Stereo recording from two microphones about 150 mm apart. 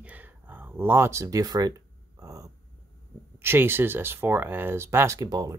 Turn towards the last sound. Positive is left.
turn(degrees=-25)  # may be behind; listen again after turning